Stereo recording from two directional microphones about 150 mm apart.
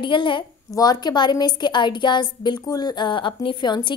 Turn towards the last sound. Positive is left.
turn(degrees=30)  # may be behind; listen again after turning